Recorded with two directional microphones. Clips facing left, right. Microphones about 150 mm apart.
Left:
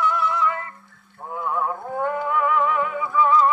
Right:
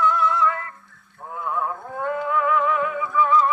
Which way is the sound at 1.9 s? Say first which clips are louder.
Even; 30° left (ahead or behind).